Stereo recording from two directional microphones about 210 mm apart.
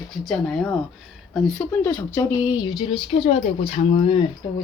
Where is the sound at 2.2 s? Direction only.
15° left (ahead or behind).